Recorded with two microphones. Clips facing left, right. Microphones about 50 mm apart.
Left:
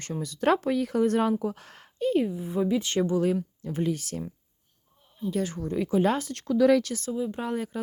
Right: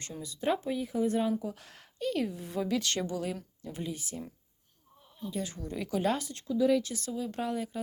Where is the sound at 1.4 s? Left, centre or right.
Left.